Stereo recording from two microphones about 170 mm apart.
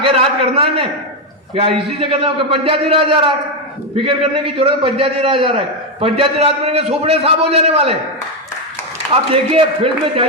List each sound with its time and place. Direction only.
0.0 s a man's voice: 35° right (ahead or behind)
9.3 s a man's voice: 35° right (ahead or behind)